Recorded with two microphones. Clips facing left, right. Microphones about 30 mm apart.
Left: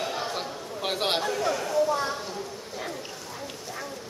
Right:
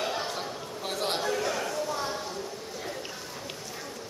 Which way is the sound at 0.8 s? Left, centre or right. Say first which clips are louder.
Left 4 dB; left.